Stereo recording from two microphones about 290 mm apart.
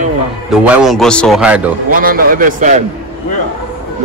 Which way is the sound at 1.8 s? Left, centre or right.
Right.